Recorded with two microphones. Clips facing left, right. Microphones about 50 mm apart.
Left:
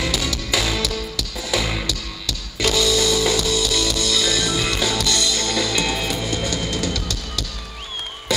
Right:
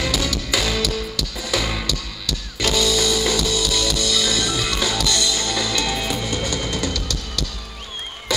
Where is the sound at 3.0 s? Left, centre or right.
Left.